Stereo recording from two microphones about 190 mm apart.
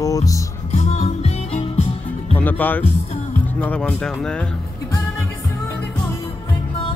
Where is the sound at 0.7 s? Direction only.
35° left (ahead or behind).